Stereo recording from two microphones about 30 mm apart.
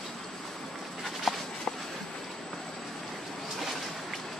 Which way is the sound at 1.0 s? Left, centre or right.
Centre.